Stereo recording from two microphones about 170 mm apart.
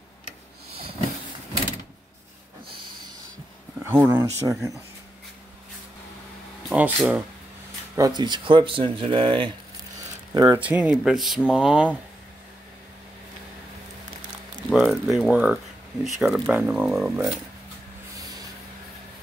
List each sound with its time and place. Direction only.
3.8 s speech: 15° right (ahead or behind)
6.7 s speech: 10° right (ahead or behind)
7.9 s speech: 25° right (ahead or behind)
10.6 s speech: 10° right (ahead or behind)
14.7 s speech: centre (ahead or behind)